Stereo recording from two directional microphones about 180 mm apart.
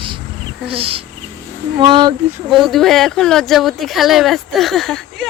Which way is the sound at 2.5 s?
Centre (ahead or behind).